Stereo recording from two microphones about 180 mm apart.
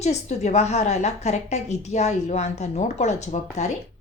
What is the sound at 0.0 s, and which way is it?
A woman's voice, 40° left (ahead or behind).